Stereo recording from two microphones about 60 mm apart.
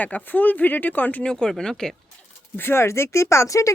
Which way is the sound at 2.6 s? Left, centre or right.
Left.